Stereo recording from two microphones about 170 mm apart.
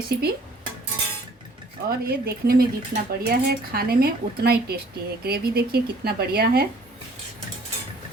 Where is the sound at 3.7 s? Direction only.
65° right (ahead or behind).